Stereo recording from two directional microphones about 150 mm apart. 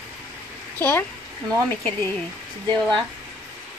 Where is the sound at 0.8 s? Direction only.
10° left (ahead or behind).